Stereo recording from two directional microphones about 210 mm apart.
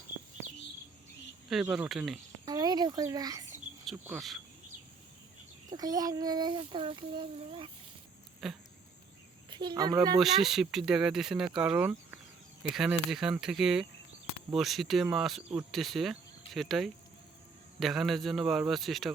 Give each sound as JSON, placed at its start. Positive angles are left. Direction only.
{"t": 1.5, "sound": "speech", "side_deg": 0}
{"t": 2.4, "sound": "speech", "side_deg": -20}
{"t": 4.0, "sound": "speech", "side_deg": -5}
{"t": 5.7, "sound": "a child's voice", "side_deg": -15}
{"t": 8.4, "sound": "speech", "side_deg": 0}
{"t": 9.5, "sound": "a child's voice", "side_deg": -20}
{"t": 10.2, "sound": "speech", "side_deg": 0}